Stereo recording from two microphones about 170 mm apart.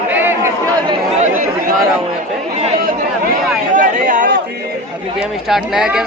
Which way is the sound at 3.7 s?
50° right (ahead or behind).